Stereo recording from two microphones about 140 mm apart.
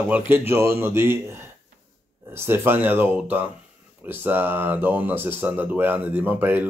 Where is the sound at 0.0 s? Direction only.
10° right (ahead or behind).